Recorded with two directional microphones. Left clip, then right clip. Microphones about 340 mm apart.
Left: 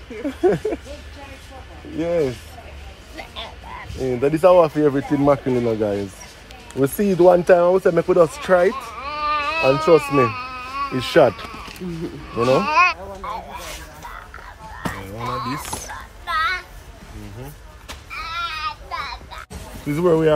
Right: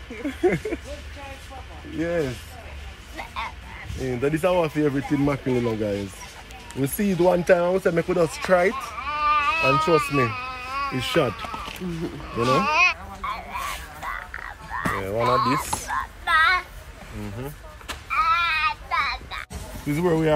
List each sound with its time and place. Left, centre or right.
0.1 s speech: centre
2.0 s speech: centre
11.6 s a sound: centre
12.4 s speech: centre
14.8 s music: centre
16.3 s child singing: centre
18.1 s a sound: centre
19.9 s speech: centre